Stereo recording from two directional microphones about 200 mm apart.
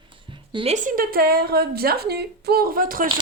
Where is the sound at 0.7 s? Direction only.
40° right (ahead or behind).